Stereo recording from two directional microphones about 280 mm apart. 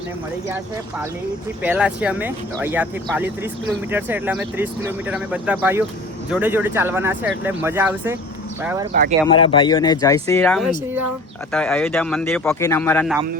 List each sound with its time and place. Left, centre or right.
1.6 s speech: centre
8.9 s speech: right
9.2 s speech: centre